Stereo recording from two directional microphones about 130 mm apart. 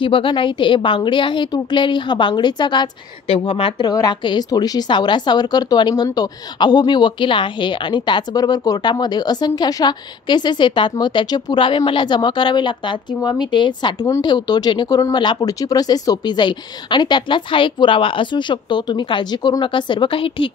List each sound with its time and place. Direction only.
0.0 s speech: 40° left (ahead or behind)
3.3 s speech: 50° left (ahead or behind)
3.9 s speech: 35° left (ahead or behind)